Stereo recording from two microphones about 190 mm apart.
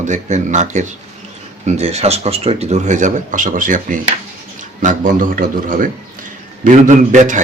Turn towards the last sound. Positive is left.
turn(degrees=-40)  # may be behind; listen again after turning